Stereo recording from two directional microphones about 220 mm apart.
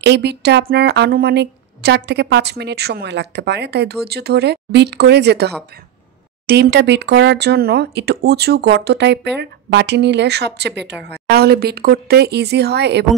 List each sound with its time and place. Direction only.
0.0 s a woman's voice: 50° right (ahead or behind)